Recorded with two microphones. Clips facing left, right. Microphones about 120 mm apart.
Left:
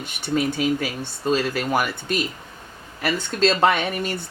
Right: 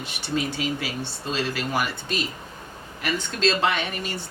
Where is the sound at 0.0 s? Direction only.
50° left (ahead or behind).